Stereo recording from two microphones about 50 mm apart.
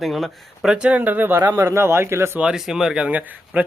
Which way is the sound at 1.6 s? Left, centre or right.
Right.